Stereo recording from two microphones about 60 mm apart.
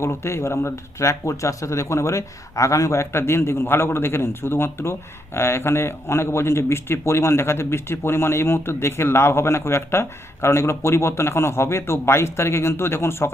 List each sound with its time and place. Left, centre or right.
0.0 s speech: left